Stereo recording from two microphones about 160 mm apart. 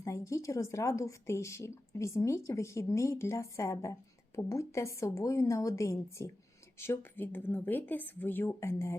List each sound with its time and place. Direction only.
0.0 s a woman's voice: 20° left (ahead or behind)